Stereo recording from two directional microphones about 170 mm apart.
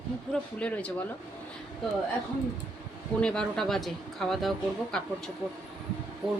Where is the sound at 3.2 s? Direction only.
5° left (ahead or behind).